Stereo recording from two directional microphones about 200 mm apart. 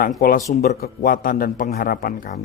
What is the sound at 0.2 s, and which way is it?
A man's voice, 45° left (ahead or behind).